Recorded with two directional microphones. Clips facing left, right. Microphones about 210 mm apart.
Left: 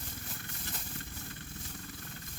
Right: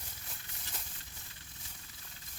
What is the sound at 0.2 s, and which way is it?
Wild animals, 55° left (ahead or behind).